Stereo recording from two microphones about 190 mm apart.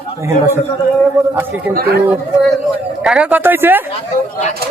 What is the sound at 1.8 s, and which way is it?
Speech, 55° right (ahead or behind).